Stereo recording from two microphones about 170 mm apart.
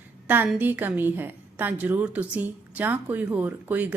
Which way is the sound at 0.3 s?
5° right (ahead or behind).